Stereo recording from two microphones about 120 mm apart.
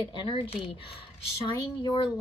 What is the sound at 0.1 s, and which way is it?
Speech, 40° left (ahead or behind).